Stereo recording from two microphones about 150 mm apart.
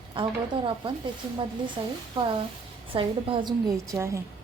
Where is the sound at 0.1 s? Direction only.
35° right (ahead or behind); by 4.2 s 20° right (ahead or behind).